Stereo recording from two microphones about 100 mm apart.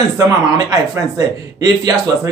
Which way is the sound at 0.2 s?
40° right (ahead or behind).